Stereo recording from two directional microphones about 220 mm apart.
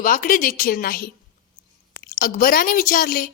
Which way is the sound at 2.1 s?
40° left (ahead or behind).